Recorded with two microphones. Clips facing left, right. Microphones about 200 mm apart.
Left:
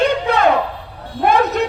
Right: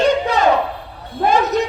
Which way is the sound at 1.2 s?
55° left (ahead or behind).